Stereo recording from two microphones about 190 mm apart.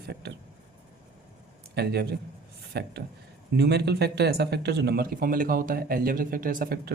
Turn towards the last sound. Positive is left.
turn(degrees=-50)  # may be behind; listen again after turning